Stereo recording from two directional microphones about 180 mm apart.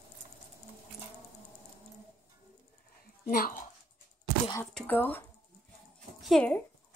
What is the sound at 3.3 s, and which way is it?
Speech, 50° left (ahead or behind).